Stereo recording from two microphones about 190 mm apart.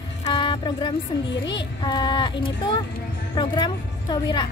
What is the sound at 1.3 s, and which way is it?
Speech, 65° left (ahead or behind).